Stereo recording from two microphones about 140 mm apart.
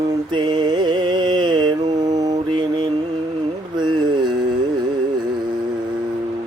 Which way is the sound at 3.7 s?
30° right (ahead or behind).